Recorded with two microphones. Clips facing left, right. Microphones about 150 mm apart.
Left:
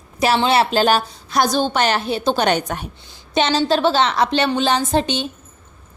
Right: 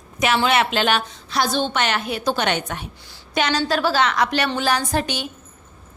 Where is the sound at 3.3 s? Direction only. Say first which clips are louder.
Left 4 dB; 25° left (ahead or behind).